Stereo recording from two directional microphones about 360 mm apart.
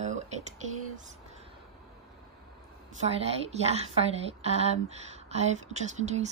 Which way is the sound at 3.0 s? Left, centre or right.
Centre.